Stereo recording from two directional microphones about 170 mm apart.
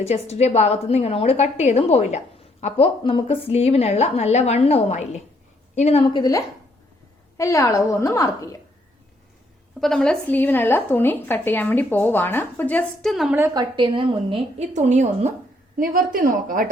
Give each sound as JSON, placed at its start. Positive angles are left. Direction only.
{"t": 0.0, "sound": "a woman's voice", "side_deg": 40}
{"t": 7.3, "sound": "a woman's voice", "side_deg": 15}
{"t": 9.8, "sound": "a woman's voice", "side_deg": 5}
{"t": 13.3, "sound": "a woman's voice", "side_deg": -20}
{"t": 15.8, "sound": "speech", "side_deg": -55}